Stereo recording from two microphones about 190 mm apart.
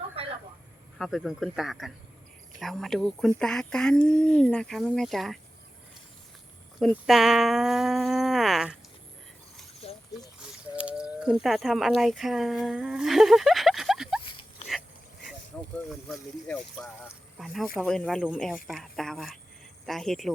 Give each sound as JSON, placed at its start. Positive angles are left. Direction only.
{"t": 0.2, "sound": "vehicle", "side_deg": -30}
{"t": 0.9, "sound": "speech", "side_deg": 0}
{"t": 6.7, "sound": "speech", "side_deg": 0}
{"t": 10.4, "sound": "a sound", "side_deg": -5}
{"t": 10.8, "sound": "speech", "side_deg": -5}
{"t": 15.5, "sound": "a sound", "side_deg": 5}
{"t": 15.9, "sound": "speech", "side_deg": 0}